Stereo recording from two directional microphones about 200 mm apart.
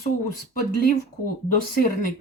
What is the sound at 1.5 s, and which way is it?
Speech, 45° left (ahead or behind).